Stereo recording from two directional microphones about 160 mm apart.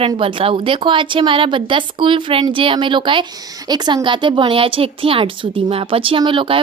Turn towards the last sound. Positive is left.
turn(degrees=-35)  # may be behind; listen again after turning